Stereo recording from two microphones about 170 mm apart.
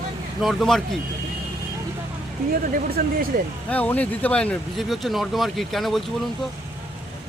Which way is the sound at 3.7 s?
10° left (ahead or behind).